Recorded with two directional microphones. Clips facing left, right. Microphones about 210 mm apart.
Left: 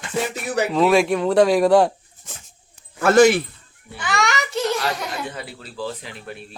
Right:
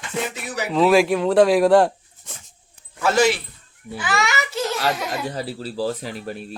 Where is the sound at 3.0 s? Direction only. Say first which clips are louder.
Left 5 dB; 55° left (ahead or behind).